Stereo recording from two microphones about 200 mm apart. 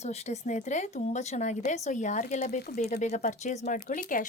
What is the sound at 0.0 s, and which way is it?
A woman's voice, 30° left (ahead or behind).